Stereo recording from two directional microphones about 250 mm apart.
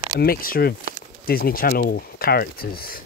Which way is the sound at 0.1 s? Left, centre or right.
Left.